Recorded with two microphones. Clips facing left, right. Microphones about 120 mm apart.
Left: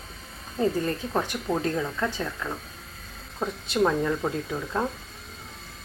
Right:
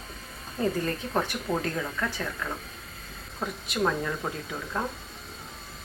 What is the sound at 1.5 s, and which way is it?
Speech, 10° right (ahead or behind).